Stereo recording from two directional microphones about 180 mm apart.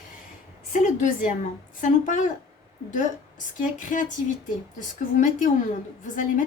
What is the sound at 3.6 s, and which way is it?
Speech, 45° left (ahead or behind).